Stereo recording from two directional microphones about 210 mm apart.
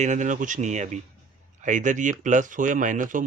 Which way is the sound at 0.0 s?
35° right (ahead or behind).